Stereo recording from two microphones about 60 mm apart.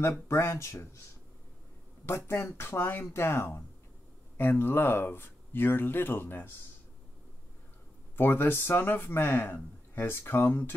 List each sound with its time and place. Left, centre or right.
0.3 s speech: left
2.0 s speech: left
8.2 s speech: left